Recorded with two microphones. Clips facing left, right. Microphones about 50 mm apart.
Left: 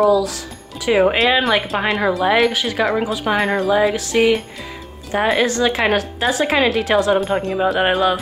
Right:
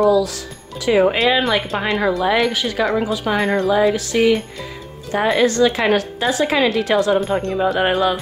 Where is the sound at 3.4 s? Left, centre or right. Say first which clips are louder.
Right 1 dB; centre.